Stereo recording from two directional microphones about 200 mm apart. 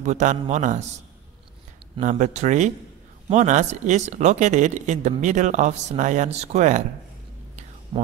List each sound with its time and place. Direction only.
0.0 s speech: 40° right (ahead or behind)
2.0 s speech: 35° right (ahead or behind)
7.9 s speech: 20° right (ahead or behind)